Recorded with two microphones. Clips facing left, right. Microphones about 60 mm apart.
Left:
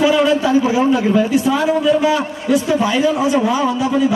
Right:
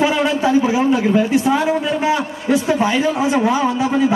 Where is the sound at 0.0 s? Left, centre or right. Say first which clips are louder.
Left 2 dB; right.